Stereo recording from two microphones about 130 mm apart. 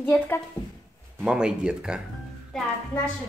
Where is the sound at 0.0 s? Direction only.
15° left (ahead or behind).